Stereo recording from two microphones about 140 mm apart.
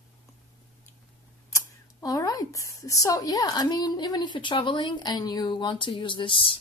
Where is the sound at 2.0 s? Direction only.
25° left (ahead or behind).